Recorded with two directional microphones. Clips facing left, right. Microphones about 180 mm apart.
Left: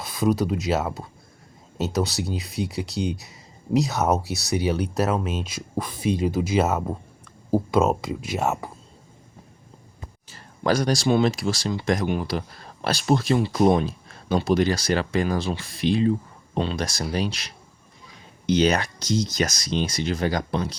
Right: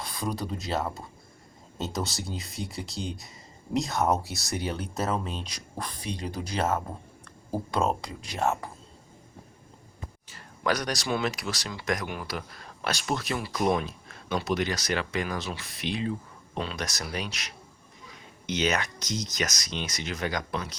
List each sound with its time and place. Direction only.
0.0 s a sound: 5° left (ahead or behind)
0.5 s speech: 5° left (ahead or behind)
2.7 s speech: 70° left (ahead or behind)
3.8 s speech: centre (ahead or behind)
4.8 s speech: 70° left (ahead or behind)
5.3 s speech: 5° left (ahead or behind)
10.3 s speech: 30° left (ahead or behind)